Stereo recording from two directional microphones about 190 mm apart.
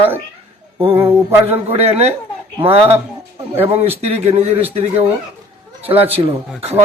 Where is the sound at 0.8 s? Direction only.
30° right (ahead or behind).